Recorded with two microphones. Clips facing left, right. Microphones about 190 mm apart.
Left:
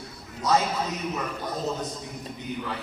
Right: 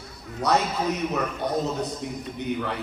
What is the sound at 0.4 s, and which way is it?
Speech, 65° right (ahead or behind).